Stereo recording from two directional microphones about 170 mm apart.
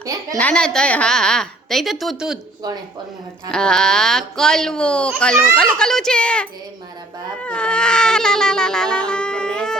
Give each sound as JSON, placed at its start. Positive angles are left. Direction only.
{"t": 0.0, "sound": "a child's voice", "side_deg": -20}
{"t": 0.3, "sound": "speech", "side_deg": 5}
{"t": 3.5, "sound": "speech", "side_deg": 5}